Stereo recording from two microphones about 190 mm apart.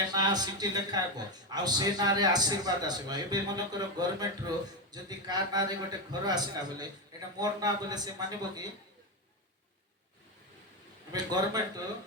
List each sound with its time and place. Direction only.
0.1 s a man's voice: 20° right (ahead or behind)
11.1 s a man's voice: 20° right (ahead or behind)